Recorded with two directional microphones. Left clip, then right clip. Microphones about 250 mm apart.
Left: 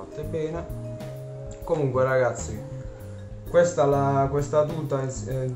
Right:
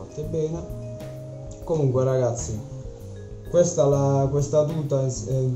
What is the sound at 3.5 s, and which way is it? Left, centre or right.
A man's voice, centre.